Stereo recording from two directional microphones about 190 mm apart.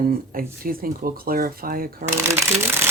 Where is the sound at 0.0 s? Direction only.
50° right (ahead or behind).